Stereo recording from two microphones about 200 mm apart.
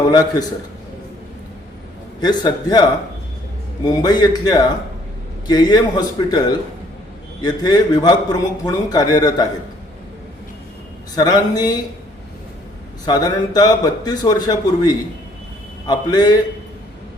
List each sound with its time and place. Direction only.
0.1 s a man's voice: 20° left (ahead or behind)
2.2 s a man's voice: 20° left (ahead or behind)
3.8 s a man's voice: 20° left (ahead or behind)
11.1 s a man's voice: 20° left (ahead or behind)
13.1 s a man's voice: 20° left (ahead or behind)